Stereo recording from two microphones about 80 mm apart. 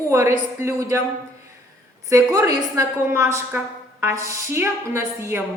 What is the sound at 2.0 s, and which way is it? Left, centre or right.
A woman's voice, right.